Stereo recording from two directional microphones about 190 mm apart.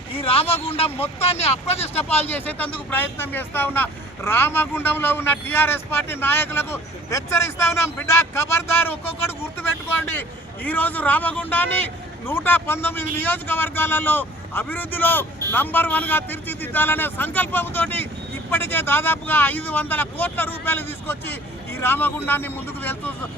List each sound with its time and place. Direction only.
0.1 s a sound: 30° left (ahead or behind)
0.9 s speech: 30° left (ahead or behind)
2.3 s speech: 10° left (ahead or behind)